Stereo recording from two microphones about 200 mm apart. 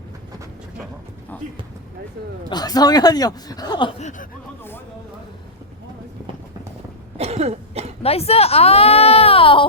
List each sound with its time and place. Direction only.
2.5 s speech: 20° left (ahead or behind)
7.2 s cough: 30° right (ahead or behind)
8.0 s speech: 30° left (ahead or behind)